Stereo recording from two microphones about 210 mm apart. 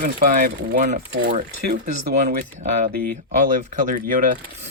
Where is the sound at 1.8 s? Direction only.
35° right (ahead or behind).